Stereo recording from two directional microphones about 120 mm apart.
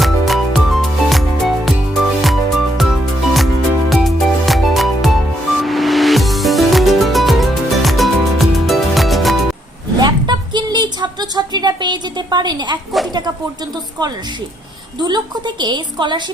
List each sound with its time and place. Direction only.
0.0 s music: centre (ahead or behind)
10.0 s a sound: 35° right (ahead or behind)
15.0 s a woman's voice: 40° right (ahead or behind)